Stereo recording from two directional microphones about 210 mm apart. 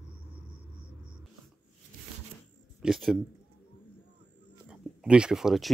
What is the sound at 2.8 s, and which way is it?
Speech, centre (ahead or behind).